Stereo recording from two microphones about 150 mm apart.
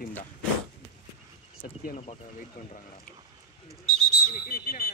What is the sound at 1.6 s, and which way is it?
Speech, 60° left (ahead or behind).